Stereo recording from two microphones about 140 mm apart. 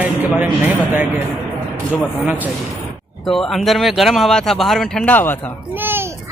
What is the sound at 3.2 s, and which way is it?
Speech, 5° left (ahead or behind).